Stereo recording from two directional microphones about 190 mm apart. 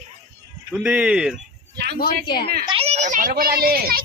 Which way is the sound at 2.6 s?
30° right (ahead or behind).